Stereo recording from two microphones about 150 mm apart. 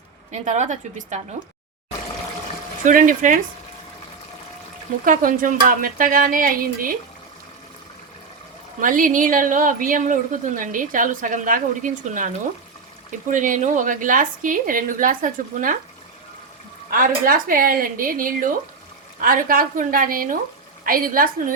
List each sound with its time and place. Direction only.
0.3 s a woman's voice: 50° right (ahead or behind)
2.8 s a woman's voice: 60° right (ahead or behind)
5.0 s speech: 65° right (ahead or behind)
8.8 s a woman's voice: 65° right (ahead or behind)
16.9 s speech: 70° right (ahead or behind)